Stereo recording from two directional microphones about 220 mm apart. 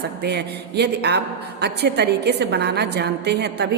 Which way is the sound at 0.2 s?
50° right (ahead or behind).